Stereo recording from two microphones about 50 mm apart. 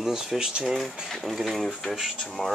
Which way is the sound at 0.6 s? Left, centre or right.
Centre.